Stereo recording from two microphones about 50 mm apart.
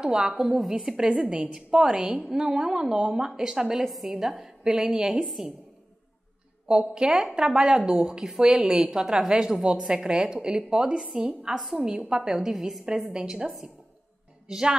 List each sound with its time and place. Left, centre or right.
0.0 s a woman's voice: centre
3.8 s a woman's voice: centre
6.7 s a woman's voice: centre
14.5 s a woman's voice: centre